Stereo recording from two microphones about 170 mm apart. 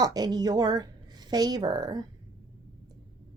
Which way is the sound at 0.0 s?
25° right (ahead or behind).